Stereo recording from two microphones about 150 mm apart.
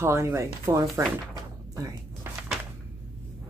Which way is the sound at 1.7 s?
25° right (ahead or behind).